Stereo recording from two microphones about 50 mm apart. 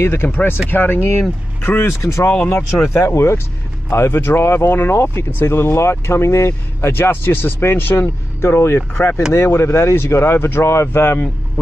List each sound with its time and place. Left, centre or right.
0.0 s speech: left
2.0 s speech: left
8.4 s speech: left
10.9 s speech: left